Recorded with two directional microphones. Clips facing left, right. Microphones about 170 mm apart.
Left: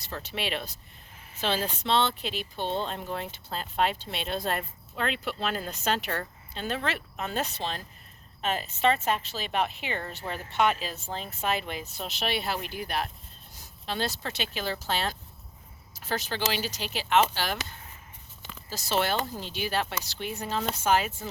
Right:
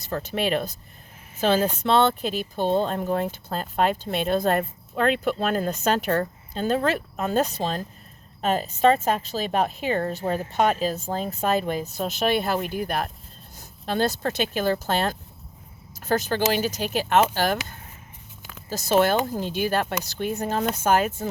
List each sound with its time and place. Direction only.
0.0 s speech: 45° right (ahead or behind)